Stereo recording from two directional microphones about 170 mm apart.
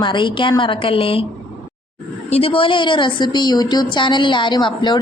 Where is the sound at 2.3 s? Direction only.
30° left (ahead or behind).